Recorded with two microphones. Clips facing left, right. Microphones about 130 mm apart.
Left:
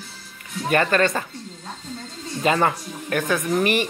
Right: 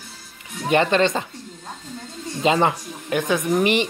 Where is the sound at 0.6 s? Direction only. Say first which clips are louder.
Right 2 dB; 20° right (ahead or behind).